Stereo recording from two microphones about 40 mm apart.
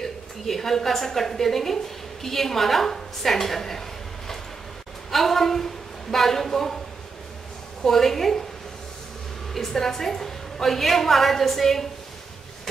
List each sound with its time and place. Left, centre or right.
0.0 s a woman's voice: centre
5.1 s a woman's voice: centre
7.8 s a woman's voice: centre
9.5 s a woman's voice: centre